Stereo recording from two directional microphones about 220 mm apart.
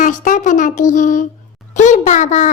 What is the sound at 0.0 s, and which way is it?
A child's voice, 35° left (ahead or behind).